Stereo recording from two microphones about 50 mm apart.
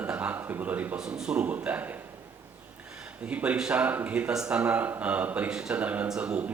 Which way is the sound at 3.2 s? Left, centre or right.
Right.